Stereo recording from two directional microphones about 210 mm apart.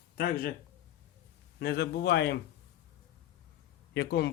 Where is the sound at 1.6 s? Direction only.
50° left (ahead or behind).